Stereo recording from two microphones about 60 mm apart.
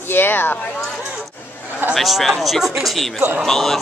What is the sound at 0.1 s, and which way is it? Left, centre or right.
Speech, left.